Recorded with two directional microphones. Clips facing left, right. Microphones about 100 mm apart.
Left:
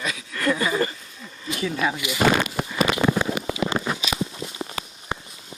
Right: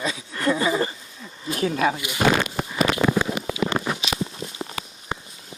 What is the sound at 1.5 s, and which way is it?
Speech, 45° right (ahead or behind).